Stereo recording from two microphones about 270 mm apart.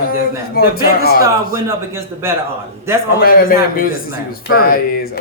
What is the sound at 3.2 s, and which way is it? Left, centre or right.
A man's voice, left.